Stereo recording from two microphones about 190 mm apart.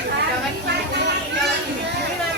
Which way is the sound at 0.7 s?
60° right (ahead or behind).